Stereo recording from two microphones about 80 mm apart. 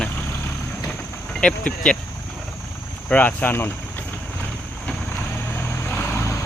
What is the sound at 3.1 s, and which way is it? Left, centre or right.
Speech, centre.